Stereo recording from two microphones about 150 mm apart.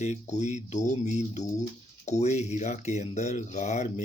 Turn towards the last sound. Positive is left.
turn(degrees=50)  # may be behind; listen again after turning